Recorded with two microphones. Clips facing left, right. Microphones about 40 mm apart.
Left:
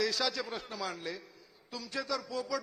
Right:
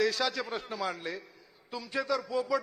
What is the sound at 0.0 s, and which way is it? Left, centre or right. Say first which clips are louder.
A man's voice: right 3 dB; centre.